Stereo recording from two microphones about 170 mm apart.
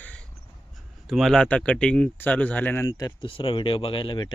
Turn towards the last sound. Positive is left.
turn(degrees=30)  # may be behind; listen again after turning